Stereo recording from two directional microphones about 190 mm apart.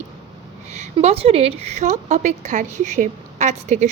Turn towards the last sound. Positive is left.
turn(degrees=-35)  # may be behind; listen again after turning